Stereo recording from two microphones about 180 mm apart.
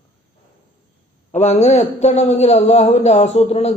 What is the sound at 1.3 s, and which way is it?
A man's voice, 35° left (ahead or behind).